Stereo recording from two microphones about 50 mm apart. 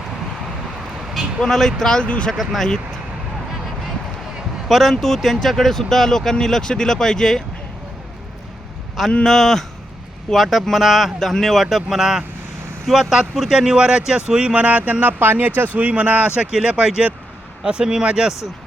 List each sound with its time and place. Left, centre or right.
1.4 s speech: centre; by 2.3 s left
2.3 s speech: centre
2.6 s speech: centre
4.7 s speech: centre
9.2 s speech: centre
13.6 s speech: centre
16.5 s speech: centre